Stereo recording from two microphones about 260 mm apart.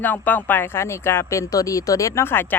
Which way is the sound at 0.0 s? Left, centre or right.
Centre.